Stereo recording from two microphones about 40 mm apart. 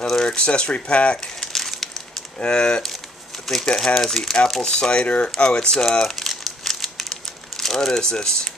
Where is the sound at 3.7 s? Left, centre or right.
Centre.